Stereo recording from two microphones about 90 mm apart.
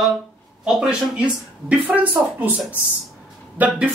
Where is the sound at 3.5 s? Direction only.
15° right (ahead or behind).